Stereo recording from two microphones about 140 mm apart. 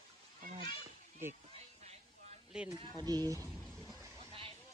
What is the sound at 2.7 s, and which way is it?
Speech, 30° left (ahead or behind).